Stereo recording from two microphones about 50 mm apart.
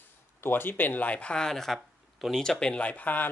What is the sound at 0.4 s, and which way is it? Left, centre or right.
Speech, left.